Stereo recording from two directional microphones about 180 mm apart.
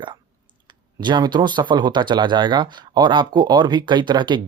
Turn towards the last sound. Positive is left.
turn(degrees=-25)  # may be behind; listen again after turning